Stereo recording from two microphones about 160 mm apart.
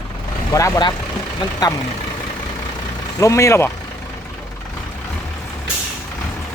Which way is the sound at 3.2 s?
20° left (ahead or behind).